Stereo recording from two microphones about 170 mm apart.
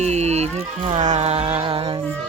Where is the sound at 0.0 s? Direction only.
40° right (ahead or behind).